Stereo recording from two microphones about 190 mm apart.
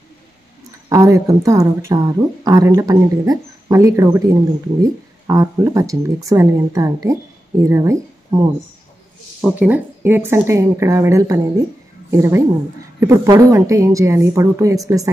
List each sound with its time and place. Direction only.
0.8 s speech: 15° right (ahead or behind)
9.4 s speech: 10° right (ahead or behind)